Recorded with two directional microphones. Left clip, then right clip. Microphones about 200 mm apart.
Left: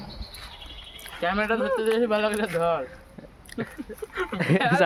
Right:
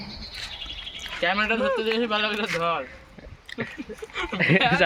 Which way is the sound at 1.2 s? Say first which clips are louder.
Right 1 dB; 55° left (ahead or behind).